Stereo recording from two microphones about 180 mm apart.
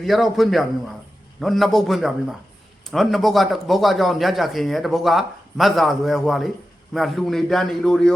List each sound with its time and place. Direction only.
0.0 s speech: centre (ahead or behind)